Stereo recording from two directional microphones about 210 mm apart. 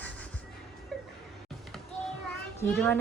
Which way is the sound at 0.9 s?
Centre (ahead or behind).